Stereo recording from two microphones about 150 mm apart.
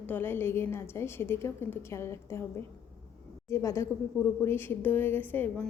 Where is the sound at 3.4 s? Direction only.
20° left (ahead or behind).